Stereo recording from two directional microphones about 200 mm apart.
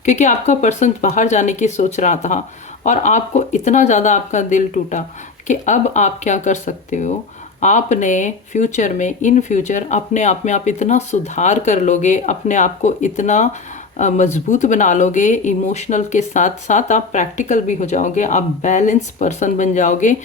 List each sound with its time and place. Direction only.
0.0 s speech: 35° left (ahead or behind)